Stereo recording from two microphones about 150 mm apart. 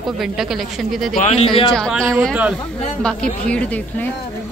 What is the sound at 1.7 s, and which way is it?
A woman's voice, 5° left (ahead or behind).